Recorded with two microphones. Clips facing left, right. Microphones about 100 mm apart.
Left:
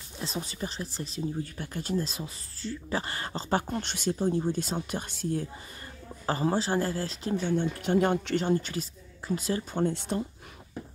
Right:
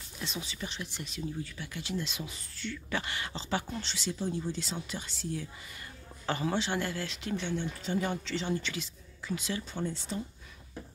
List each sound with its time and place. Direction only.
0.2 s speech: 40° left (ahead or behind)
6.2 s speech: 35° left (ahead or behind)
7.8 s speech: 55° left (ahead or behind); by 9.8 s 40° left (ahead or behind)
9.8 s speech: 60° left (ahead or behind)